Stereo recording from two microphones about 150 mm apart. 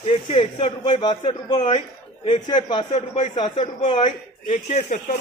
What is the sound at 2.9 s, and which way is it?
Speech, 50° left (ahead or behind).